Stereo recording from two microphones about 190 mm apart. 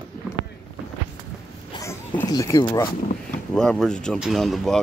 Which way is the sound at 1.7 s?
15° left (ahead or behind).